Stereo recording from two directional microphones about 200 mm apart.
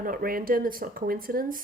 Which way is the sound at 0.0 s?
45° right (ahead or behind).